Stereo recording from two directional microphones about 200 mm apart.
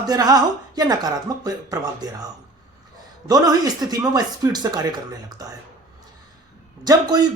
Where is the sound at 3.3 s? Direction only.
20° right (ahead or behind).